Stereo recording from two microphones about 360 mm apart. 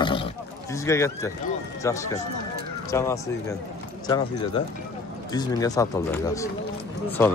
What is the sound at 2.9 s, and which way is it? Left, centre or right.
Speech, centre.